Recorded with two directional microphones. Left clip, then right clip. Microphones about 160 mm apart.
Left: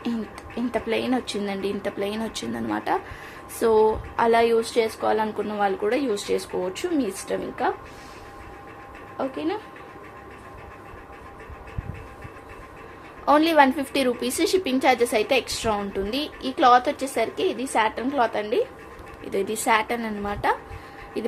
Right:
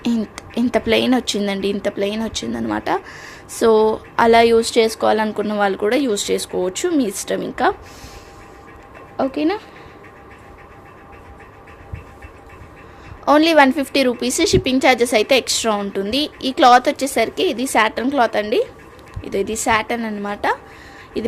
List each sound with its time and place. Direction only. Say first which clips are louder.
0.0 s a woman's voice: right 8 dB; 55° right (ahead or behind)
9.1 s a woman's voice: right 8 dB; 90° right
13.2 s a woman's voice: right 5 dB; 45° right (ahead or behind)
19.2 s a woman's voice: right 5 dB; 40° right (ahead or behind)